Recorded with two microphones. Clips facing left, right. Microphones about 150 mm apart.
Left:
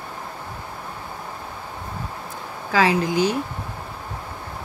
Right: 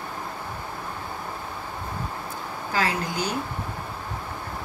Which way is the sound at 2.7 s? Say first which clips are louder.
Left 7 dB; 90° left.